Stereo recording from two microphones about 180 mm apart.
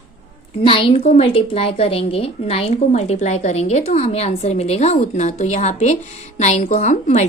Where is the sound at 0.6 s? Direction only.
30° left (ahead or behind).